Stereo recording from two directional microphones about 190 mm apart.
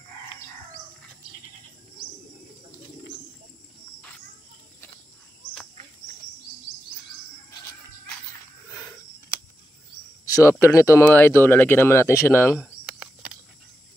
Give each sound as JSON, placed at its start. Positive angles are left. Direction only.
{"t": 10.2, "sound": "cricket", "side_deg": 20}
{"t": 10.6, "sound": "speech", "side_deg": 15}